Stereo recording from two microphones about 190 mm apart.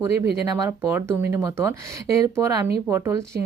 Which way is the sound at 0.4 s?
15° right (ahead or behind).